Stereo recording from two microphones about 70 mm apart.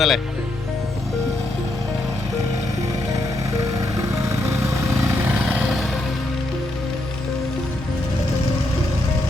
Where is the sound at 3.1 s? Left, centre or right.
Right.